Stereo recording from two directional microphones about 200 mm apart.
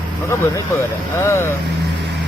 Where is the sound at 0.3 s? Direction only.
15° left (ahead or behind).